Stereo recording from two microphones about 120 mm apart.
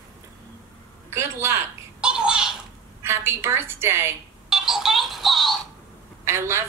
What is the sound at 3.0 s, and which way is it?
A woman's voice, 20° right (ahead or behind).